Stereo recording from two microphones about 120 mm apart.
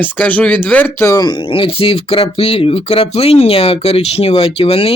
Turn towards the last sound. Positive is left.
turn(degrees=50)  # may be behind; listen again after turning